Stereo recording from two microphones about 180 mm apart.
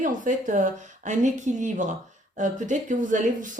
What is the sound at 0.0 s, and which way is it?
Speech, 45° right (ahead or behind).